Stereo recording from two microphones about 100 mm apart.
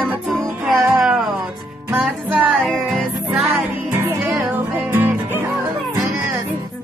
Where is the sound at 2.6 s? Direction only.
Centre (ahead or behind).